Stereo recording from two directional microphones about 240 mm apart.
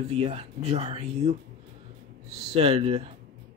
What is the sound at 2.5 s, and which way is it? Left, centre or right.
Speech, right.